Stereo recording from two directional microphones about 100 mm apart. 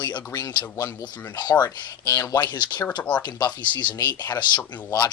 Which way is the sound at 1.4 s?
45° left (ahead or behind).